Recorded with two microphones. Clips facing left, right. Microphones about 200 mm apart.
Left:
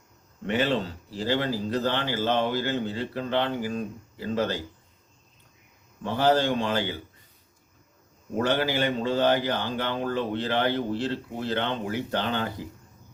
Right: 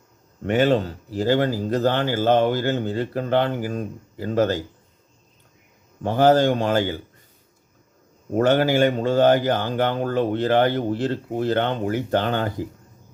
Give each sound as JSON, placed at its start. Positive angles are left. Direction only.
{"t": 0.4, "sound": "speech", "side_deg": -45}
{"t": 6.0, "sound": "speech", "side_deg": -45}
{"t": 8.4, "sound": "speech", "side_deg": -50}